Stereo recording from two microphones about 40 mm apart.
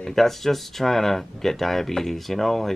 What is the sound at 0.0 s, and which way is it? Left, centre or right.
Speech, centre.